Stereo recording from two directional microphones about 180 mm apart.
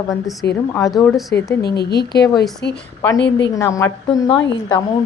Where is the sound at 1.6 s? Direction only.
65° left (ahead or behind).